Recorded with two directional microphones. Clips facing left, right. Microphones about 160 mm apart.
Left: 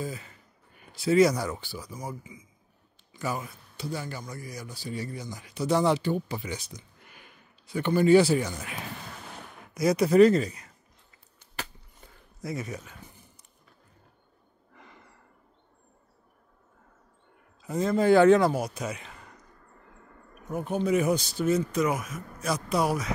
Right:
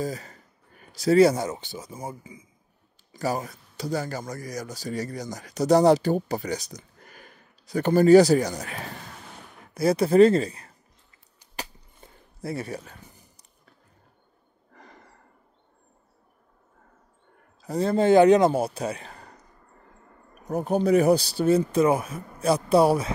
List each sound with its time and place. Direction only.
0.0 s speech: 40° right (ahead or behind)
9.8 s speech: 30° right (ahead or behind)
12.4 s speech: 30° right (ahead or behind)
14.7 s snort: 40° right (ahead or behind)
17.6 s a man's voice: 35° right (ahead or behind)
18.1 s speech: 20° right (ahead or behind); by 19.3 s 35° right (ahead or behind)
20.4 s speech: 40° right (ahead or behind)